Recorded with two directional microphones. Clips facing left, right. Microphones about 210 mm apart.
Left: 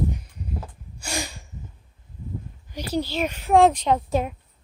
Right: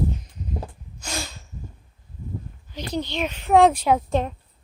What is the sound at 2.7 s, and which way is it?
Speech, 10° left (ahead or behind).